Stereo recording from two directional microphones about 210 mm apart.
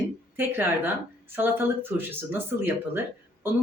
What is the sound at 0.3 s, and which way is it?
A woman's voice, 10° right (ahead or behind).